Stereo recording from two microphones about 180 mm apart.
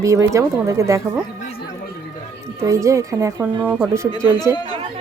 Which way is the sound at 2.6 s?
15° right (ahead or behind).